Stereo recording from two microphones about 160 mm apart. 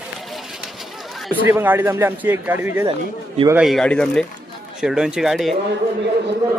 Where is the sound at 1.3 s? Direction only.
10° right (ahead or behind).